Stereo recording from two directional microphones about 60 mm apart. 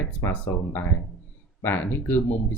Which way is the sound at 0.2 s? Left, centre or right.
Left.